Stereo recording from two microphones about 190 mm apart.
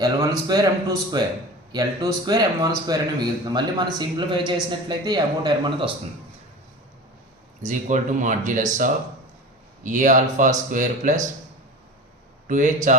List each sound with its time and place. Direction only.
0.0 s a man's voice: 20° right (ahead or behind)
7.6 s speech: 40° right (ahead or behind)
12.5 s speech: 40° right (ahead or behind)